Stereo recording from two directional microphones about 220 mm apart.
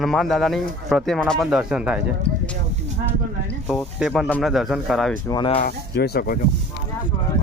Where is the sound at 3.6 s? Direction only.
Centre (ahead or behind).